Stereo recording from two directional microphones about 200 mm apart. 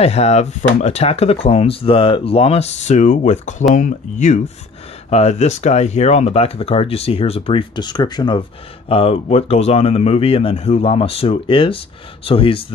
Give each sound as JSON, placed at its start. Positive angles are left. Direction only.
{"t": 0.0, "sound": "speech", "side_deg": 30}